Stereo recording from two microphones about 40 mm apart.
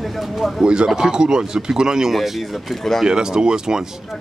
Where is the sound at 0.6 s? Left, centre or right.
Centre.